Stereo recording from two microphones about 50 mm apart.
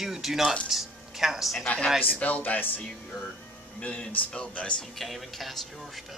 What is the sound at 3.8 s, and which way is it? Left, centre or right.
Speech, centre.